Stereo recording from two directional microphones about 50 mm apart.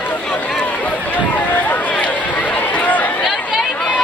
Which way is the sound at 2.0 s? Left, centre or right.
Left.